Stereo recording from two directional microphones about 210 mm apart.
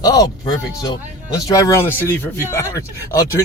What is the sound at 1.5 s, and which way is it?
Speech, 15° left (ahead or behind).